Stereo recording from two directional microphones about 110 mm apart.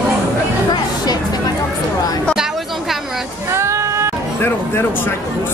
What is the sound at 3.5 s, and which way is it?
Music, 25° right (ahead or behind).